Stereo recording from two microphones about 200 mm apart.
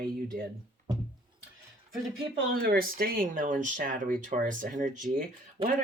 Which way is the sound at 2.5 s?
50° right (ahead or behind).